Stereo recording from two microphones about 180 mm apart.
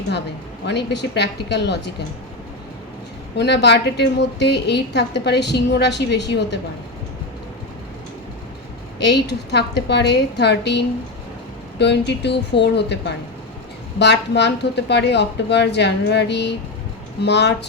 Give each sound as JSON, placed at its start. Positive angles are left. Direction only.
{"t": 0.6, "sound": "a woman's voice", "side_deg": 70}
{"t": 3.3, "sound": "a woman's voice", "side_deg": 70}
{"t": 9.0, "sound": "a woman's voice", "side_deg": 70}